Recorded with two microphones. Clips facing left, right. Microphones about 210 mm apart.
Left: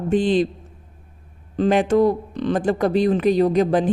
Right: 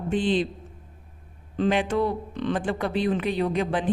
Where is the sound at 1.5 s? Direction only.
40° left (ahead or behind).